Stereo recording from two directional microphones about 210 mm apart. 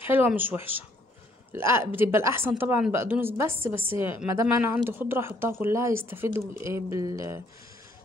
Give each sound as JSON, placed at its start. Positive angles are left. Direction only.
{"t": 0.0, "sound": "speech", "side_deg": -10}